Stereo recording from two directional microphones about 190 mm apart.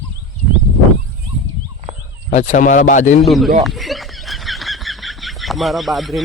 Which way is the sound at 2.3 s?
35° left (ahead or behind).